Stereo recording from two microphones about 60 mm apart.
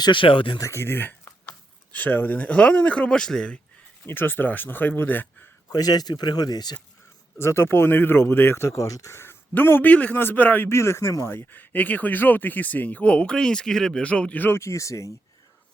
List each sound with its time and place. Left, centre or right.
0.6 s speech: left
1.5 s speech: left; by 3.6 s centre
4.0 s speech: left
5.7 s speech: left
7.3 s speech: left
9.6 s speech: left
10.7 s speech: left
11.3 s speech: left; by 14.0 s centre
14.0 s speech: left
14.4 s speech: left